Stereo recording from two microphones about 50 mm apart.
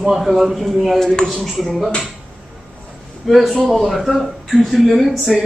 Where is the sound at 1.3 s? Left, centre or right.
Centre.